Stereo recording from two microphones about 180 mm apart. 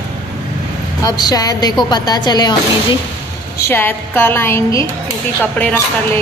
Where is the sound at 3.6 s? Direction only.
10° left (ahead or behind).